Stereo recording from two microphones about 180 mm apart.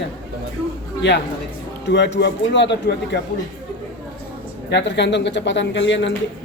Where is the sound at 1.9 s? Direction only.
75° left (ahead or behind).